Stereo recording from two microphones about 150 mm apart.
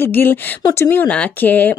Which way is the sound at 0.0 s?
15° left (ahead or behind).